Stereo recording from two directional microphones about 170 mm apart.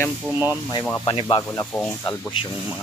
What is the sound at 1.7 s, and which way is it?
Speech, 10° left (ahead or behind).